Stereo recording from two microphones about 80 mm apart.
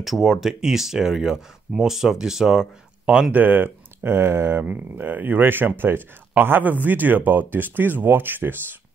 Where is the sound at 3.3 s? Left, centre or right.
Right.